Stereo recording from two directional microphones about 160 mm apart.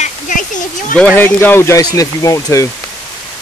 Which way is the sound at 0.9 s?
10° left (ahead or behind).